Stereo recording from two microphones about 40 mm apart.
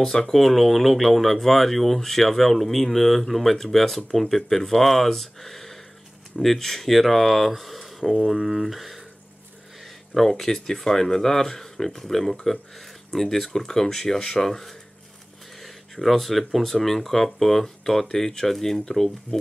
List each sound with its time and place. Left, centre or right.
0.0 s speech: centre
10.1 s speech: centre